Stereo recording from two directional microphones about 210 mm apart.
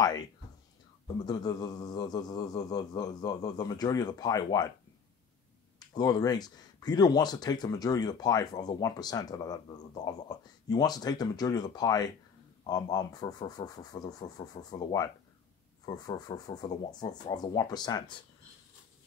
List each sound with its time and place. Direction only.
1.0 s a man's voice: 20° left (ahead or behind)
5.8 s a man's voice: 20° left (ahead or behind)